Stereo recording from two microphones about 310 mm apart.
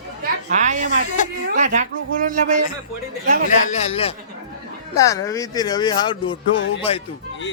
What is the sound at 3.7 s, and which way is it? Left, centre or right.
A man's voice, left.